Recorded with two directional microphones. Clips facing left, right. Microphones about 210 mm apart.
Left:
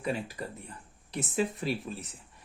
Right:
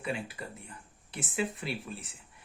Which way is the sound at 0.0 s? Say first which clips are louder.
Left 3 dB; 40° left (ahead or behind).